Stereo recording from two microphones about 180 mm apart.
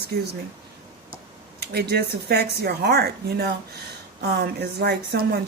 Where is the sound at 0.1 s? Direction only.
65° right (ahead or behind).